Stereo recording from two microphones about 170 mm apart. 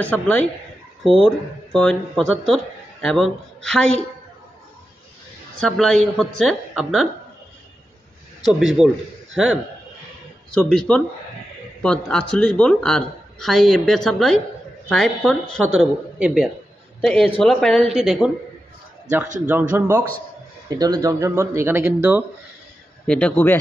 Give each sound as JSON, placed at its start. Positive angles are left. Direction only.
{"t": 0.0, "sound": "speech", "side_deg": 10}
{"t": 1.7, "sound": "speech", "side_deg": 5}
{"t": 5.7, "sound": "speech", "side_deg": 5}
{"t": 8.5, "sound": "a man's voice", "side_deg": 0}
{"t": 16.2, "sound": "speech", "side_deg": -5}
{"t": 19.7, "sound": "speech", "side_deg": -10}
{"t": 20.7, "sound": "speech", "side_deg": -25}
{"t": 23.0, "sound": "speech", "side_deg": 5}